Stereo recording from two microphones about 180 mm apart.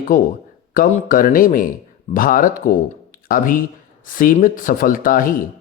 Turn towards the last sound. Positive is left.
turn(degrees=50)  # may be behind; listen again after turning